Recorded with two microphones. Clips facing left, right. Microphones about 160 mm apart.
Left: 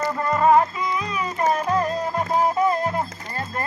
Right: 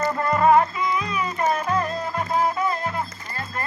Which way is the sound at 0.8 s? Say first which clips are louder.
Right 1 dB; 35° left (ahead or behind).